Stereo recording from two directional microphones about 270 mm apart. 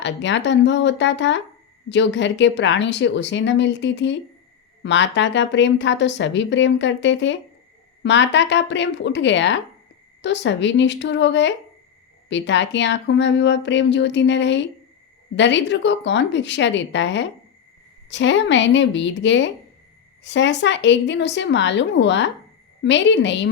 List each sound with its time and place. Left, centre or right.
0.0 s a woman's voice: left